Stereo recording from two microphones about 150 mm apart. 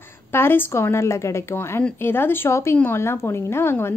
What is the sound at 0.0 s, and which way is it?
A woman's voice, 15° left (ahead or behind).